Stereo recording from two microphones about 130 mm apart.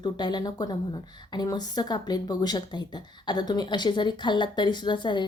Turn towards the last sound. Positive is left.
turn(degrees=35)  # may be behind; listen again after turning